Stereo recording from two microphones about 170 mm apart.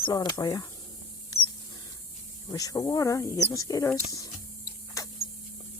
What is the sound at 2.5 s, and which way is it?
Speech, 20° left (ahead or behind).